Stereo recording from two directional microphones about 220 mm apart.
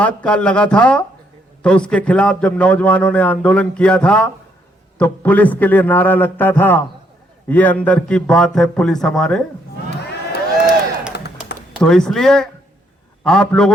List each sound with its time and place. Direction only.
0.0 s a man's voice: 5° left (ahead or behind)
9.9 s crowd: 50° left (ahead or behind)
11.1 s tap: 50° left (ahead or behind)
11.8 s a man's voice: 5° left (ahead or behind)